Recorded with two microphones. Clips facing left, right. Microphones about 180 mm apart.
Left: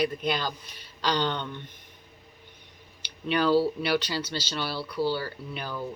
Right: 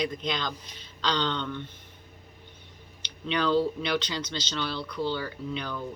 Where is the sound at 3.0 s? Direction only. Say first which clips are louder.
Left 3 dB; 10° left (ahead or behind).